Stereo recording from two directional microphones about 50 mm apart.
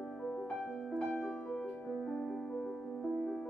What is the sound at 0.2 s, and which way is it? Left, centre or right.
Music, centre.